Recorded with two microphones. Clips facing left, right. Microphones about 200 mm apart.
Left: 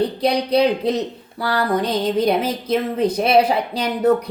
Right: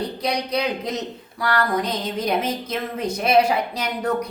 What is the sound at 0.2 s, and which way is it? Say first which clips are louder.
Speech: left 7 dB; 30° left (ahead or behind).